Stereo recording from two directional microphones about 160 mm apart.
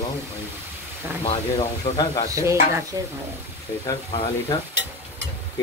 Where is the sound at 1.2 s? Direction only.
30° left (ahead or behind).